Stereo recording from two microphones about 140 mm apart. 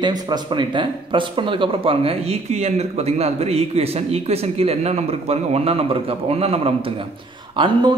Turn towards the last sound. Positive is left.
turn(degrees=-30)  # may be behind; listen again after turning